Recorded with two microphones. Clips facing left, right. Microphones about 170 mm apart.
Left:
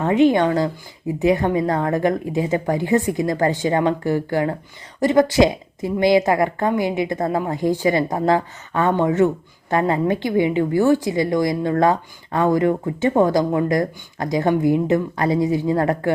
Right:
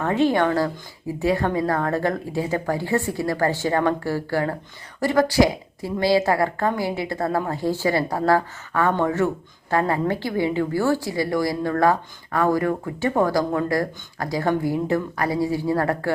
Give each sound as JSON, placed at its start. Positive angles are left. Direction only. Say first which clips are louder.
{"t": 0.0, "sound": "a woman's voice", "louder": "left 4 dB", "side_deg": 20}